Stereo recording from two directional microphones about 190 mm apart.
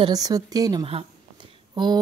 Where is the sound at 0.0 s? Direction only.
20° right (ahead or behind).